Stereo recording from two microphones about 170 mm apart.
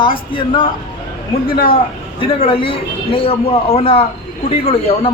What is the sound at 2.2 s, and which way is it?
A man's voice, 30° left (ahead or behind).